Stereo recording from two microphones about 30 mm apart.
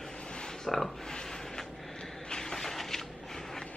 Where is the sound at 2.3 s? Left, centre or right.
Left.